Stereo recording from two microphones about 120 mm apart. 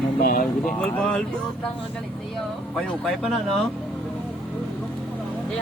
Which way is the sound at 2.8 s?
5° left (ahead or behind).